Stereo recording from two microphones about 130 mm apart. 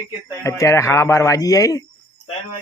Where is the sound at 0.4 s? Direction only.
25° left (ahead or behind).